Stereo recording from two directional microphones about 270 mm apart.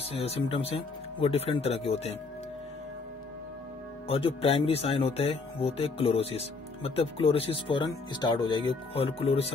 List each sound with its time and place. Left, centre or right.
0.2 s speech: left
4.1 s speech: left